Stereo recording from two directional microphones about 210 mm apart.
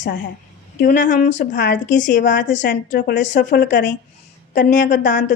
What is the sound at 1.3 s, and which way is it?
Speech, 55° left (ahead or behind).